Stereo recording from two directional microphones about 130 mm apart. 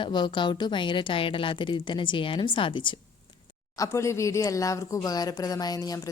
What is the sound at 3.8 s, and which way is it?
Speech, 20° left (ahead or behind).